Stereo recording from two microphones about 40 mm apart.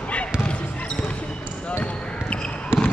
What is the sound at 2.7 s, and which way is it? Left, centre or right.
Basketball bounce, right.